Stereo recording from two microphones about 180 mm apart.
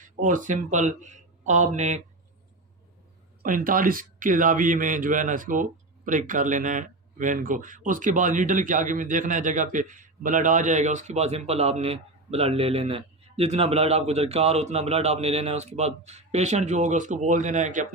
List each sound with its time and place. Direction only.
0.2 s a man's voice: 45° right (ahead or behind)
3.4 s a man's voice: 50° right (ahead or behind)